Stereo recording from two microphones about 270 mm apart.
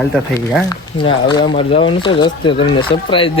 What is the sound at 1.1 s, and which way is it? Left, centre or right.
Speech, centre.